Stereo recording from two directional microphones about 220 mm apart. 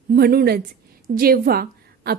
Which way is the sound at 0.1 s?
45° right (ahead or behind).